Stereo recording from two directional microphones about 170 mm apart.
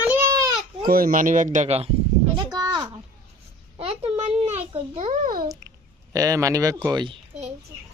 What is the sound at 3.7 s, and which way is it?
A child's voice, 35° right (ahead or behind).